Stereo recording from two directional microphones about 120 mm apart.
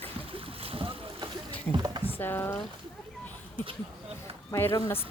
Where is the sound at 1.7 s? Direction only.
40° right (ahead or behind).